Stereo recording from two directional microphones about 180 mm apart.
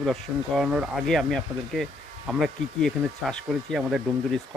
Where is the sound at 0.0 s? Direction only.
Centre (ahead or behind).